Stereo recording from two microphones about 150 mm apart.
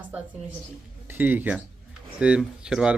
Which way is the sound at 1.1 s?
15° right (ahead or behind).